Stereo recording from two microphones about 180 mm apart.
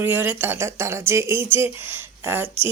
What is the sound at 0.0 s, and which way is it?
Speech, 10° right (ahead or behind).